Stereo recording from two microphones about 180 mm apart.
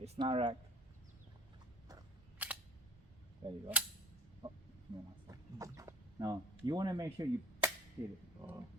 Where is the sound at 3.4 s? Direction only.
25° right (ahead or behind).